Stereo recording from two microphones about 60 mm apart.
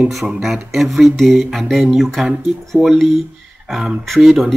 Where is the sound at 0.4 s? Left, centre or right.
Centre.